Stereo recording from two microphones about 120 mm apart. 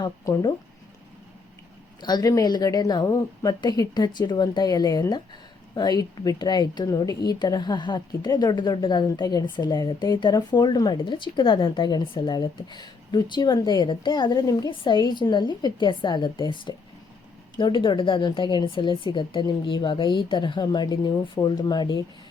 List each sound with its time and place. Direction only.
2.0 s a woman's voice: 35° left (ahead or behind)